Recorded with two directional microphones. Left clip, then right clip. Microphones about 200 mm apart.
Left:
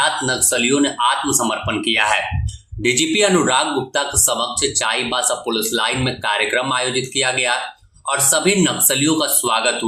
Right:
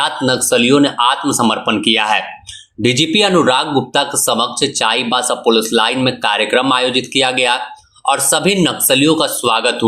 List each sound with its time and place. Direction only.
0.0 s speech: 30° right (ahead or behind)